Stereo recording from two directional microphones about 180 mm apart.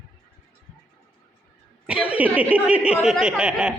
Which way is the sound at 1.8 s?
5° right (ahead or behind).